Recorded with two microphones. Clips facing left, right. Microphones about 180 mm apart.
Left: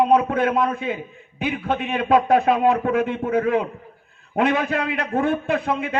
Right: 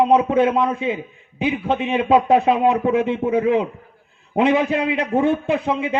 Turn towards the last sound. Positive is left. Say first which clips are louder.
# right 2 dB
turn(degrees=-20)  # may be behind; listen again after turning